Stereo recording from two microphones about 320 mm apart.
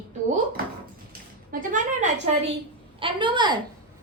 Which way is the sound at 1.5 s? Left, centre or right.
Right.